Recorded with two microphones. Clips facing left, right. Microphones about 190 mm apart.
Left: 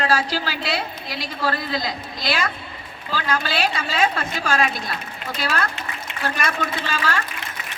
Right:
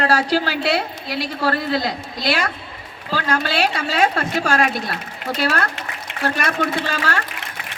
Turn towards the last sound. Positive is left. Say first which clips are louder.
# right 2 dB
turn(degrees=-55)  # may be behind; listen again after turning